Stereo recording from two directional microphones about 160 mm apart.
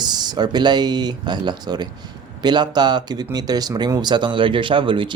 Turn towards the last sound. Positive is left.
turn(degrees=-30)  # may be behind; listen again after turning